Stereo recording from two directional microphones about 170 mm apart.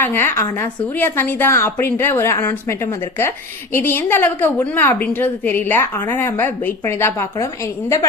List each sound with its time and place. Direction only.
0.0 s speech: 15° left (ahead or behind)